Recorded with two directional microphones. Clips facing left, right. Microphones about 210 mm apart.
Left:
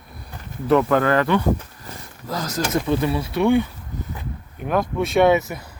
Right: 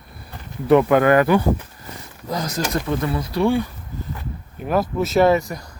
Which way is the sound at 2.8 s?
15° left (ahead or behind).